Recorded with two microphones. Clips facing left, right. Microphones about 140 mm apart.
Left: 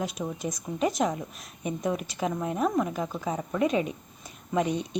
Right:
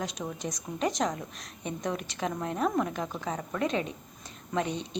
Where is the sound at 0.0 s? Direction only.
10° left (ahead or behind).